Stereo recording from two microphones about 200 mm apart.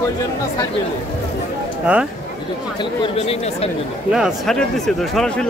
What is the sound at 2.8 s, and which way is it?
Speech, 30° left (ahead or behind).